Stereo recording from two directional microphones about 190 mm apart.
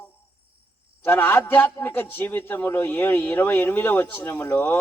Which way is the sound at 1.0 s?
10° left (ahead or behind).